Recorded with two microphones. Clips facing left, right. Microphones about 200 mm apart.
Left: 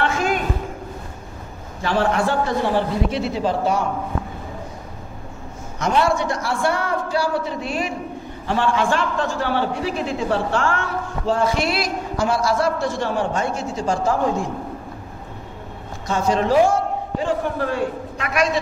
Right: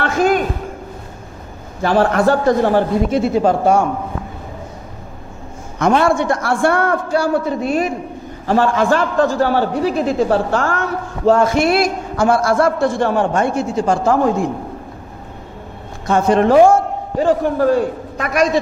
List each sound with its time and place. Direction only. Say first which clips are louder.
0.0 s a sound: right 6 dB; 45° right (ahead or behind)
1.8 s a man's voice: right 5 dB; 45° right (ahead or behind)
5.8 s a man's voice: right 5 dB; 55° right (ahead or behind)
16.1 s a man's voice: right 6 dB; 55° right (ahead or behind); by 18.6 s 40° right (ahead or behind)